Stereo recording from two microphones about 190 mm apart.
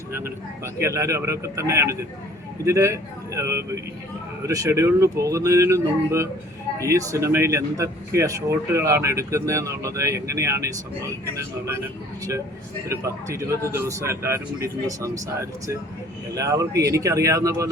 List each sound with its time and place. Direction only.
0.1 s speech: 15° right (ahead or behind)
12.9 s speech: 15° right (ahead or behind)